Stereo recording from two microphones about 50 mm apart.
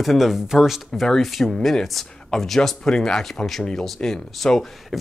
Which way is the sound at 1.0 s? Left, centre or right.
Centre.